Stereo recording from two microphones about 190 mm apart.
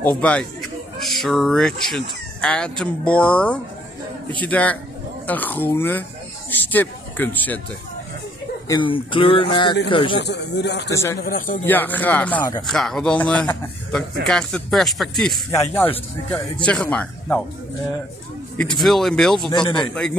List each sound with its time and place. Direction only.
0.0 s speech: 10° left (ahead or behind)
8.6 s a sound: 25° left (ahead or behind)
10.2 s speech: 65° left (ahead or behind)
10.9 s speech: 15° left (ahead or behind)
11.1 s speech: 45° left (ahead or behind)
11.6 s a man's voice: 10° left (ahead or behind)
15.5 s speech: 15° left (ahead or behind)
18.8 s a man's voice: centre (ahead or behind)
19.5 s a sound: 25° left (ahead or behind)